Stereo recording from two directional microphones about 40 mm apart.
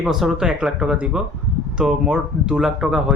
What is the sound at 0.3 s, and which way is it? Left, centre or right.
Speech, centre.